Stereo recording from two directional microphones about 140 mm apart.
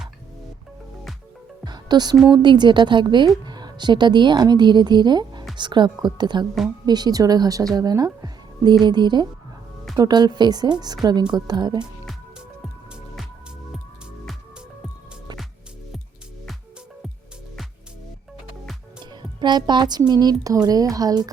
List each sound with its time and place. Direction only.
1.6 s music: 30° right (ahead or behind)
2.2 s a woman's voice: 30° right (ahead or behind)
19.1 s speech: 30° right (ahead or behind)